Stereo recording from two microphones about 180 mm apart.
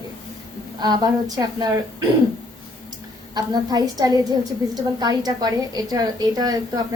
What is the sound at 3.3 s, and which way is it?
A woman's voice, 20° right (ahead or behind).